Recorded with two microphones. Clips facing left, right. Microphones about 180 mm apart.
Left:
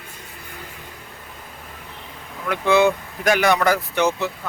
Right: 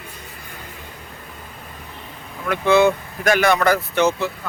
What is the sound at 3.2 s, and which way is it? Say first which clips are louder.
A man's voice: right 1 dB; 15° left (ahead or behind).